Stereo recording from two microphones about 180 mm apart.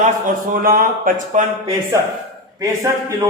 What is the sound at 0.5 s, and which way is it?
Speech, 50° right (ahead or behind).